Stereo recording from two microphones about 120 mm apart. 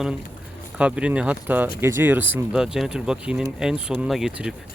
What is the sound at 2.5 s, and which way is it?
Speech, 5° right (ahead or behind).